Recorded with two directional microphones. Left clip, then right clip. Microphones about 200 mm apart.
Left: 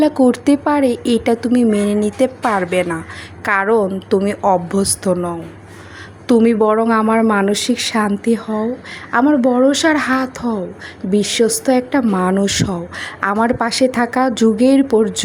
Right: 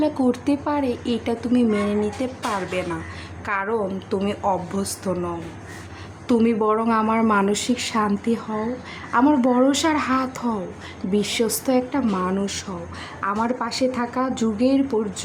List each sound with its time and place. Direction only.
0.0 s a woman's voice: 30° left (ahead or behind)